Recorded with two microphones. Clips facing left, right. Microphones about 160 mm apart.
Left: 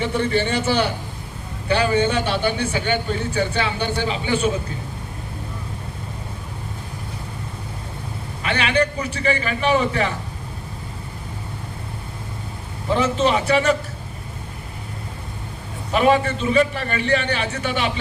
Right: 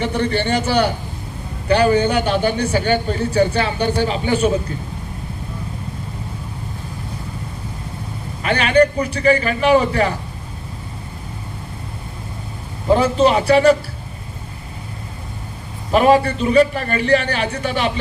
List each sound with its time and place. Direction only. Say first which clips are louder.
0.0 s speech: right 2 dB; 35° right (ahead or behind)
1.6 s speech: right 4 dB; 40° right (ahead or behind)
8.4 s speech: right 6 dB; 40° right (ahead or behind)
12.9 s speech: right 5 dB; 40° right (ahead or behind)
15.9 s speech: right 4 dB; 40° right (ahead or behind)